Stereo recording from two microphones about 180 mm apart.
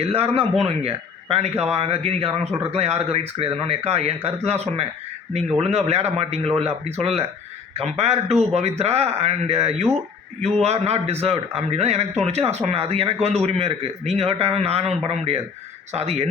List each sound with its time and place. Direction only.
0.0 s speech: 35° right (ahead or behind)